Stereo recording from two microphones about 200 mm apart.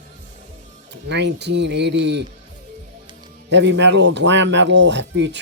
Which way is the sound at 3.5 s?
60° right (ahead or behind).